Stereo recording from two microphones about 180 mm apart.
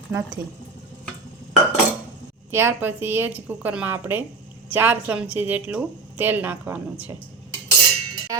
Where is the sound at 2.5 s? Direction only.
15° right (ahead or behind).